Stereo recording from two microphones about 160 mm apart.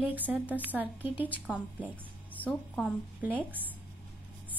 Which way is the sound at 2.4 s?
10° left (ahead or behind).